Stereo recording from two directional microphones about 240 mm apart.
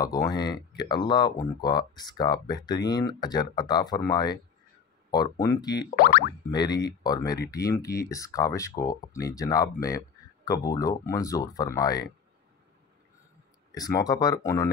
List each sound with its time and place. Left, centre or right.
0.0 s speech: centre
5.7 s speech: left
6.8 s speech: centre
13.7 s speech: centre